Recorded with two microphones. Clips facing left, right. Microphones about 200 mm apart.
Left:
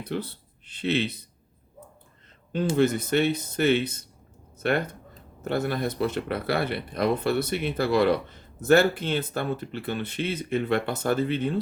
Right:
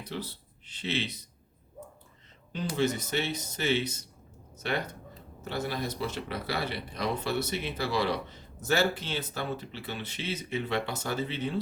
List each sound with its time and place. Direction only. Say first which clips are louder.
0.0 s speech: left 6 dB; 55° left (ahead or behind)
2.7 s speech: left 6 dB; 55° left (ahead or behind)